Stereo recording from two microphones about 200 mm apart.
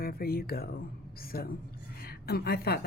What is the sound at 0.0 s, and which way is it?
A woman's voice, 50° left (ahead or behind).